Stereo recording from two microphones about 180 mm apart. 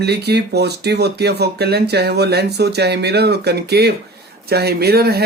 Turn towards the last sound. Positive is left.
turn(degrees=-60)  # may be behind; listen again after turning